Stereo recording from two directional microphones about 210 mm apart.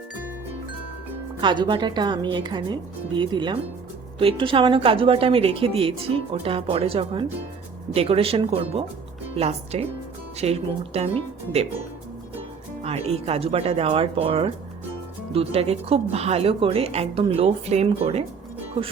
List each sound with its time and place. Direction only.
1.4 s a woman's voice: 20° right (ahead or behind)
12.8 s a woman's voice: 30° right (ahead or behind)